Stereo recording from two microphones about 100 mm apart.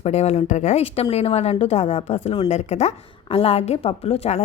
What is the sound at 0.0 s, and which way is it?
A woman's voice, 90° left.